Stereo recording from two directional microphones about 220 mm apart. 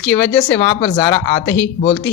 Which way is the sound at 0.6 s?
20° left (ahead or behind).